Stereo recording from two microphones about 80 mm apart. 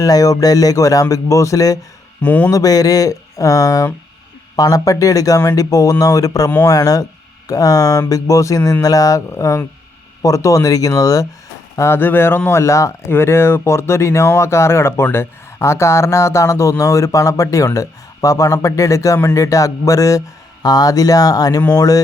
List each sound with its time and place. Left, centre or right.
0.0 s speech: left
2.2 s speech: left
2.5 s speech: left
9.3 s speech: left
11.8 s speech: left